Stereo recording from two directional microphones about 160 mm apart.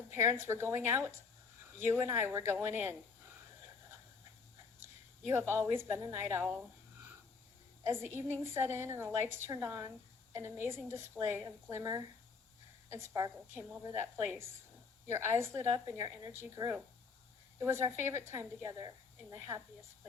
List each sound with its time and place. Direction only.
0.1 s a woman's voice: 15° right (ahead or behind)
4.8 s a woman's voice: 15° right (ahead or behind)
7.9 s a woman's voice: 15° right (ahead or behind)